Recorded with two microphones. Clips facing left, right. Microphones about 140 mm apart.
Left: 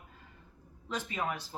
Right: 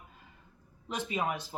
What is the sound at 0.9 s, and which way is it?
Speech, 15° right (ahead or behind).